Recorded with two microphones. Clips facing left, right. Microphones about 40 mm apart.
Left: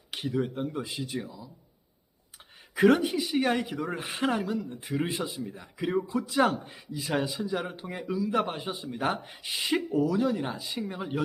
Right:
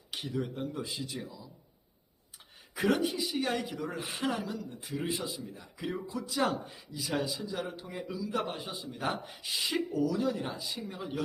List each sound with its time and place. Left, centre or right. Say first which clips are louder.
0.3 s a man's voice: left 5 dB; left
2.7 s a man's voice: left 7 dB; left; by 10.6 s centre
10.6 s speech: left 5 dB; left